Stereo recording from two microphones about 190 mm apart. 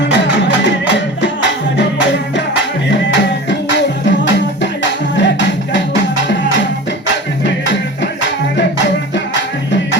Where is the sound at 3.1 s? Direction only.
70° left (ahead or behind).